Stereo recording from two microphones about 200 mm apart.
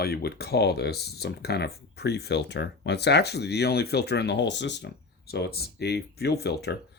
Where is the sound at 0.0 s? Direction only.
50° left (ahead or behind).